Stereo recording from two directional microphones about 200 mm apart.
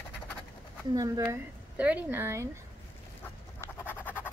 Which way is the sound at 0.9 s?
15° right (ahead or behind).